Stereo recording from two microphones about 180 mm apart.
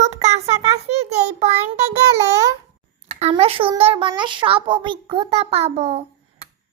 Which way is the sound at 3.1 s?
35° right (ahead or behind).